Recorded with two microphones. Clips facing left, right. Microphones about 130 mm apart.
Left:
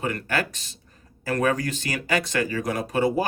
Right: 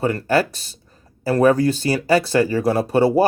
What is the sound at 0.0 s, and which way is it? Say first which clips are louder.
Speech: right 8 dB; 35° right (ahead or behind).